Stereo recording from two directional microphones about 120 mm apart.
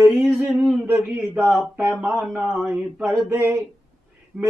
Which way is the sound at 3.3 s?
20° right (ahead or behind).